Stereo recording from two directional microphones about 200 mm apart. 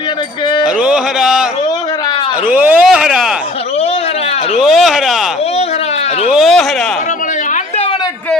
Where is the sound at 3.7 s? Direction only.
30° left (ahead or behind).